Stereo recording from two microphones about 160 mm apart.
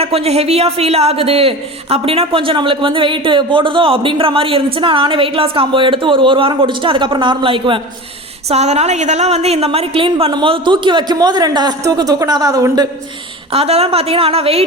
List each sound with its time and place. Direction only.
0.0 s a man's voice: 40° right (ahead or behind); by 12.9 s 20° right (ahead or behind)
13.5 s a man's voice: 40° right (ahead or behind)